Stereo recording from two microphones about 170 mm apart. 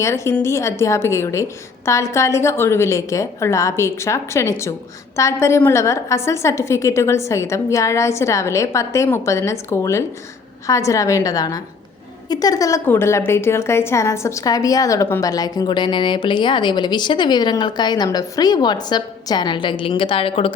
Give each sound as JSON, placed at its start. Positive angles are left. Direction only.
{"t": 0.0, "sound": "a woman's voice", "side_deg": 15}